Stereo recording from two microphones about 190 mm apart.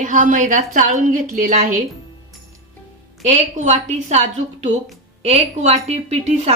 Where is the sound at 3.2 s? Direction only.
40° right (ahead or behind).